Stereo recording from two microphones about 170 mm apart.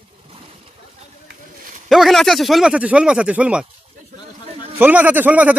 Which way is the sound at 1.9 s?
Centre (ahead or behind).